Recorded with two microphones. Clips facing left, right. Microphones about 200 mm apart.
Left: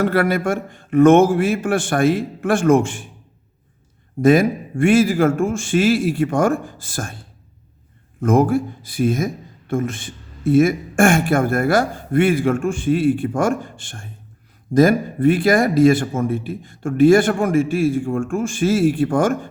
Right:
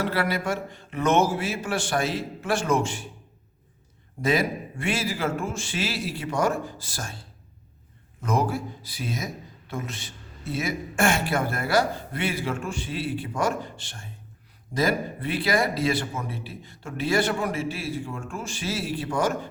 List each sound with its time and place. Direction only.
0.0 s speech: 50° left (ahead or behind)
4.2 s speech: 50° left (ahead or behind)
8.2 s speech: 50° left (ahead or behind)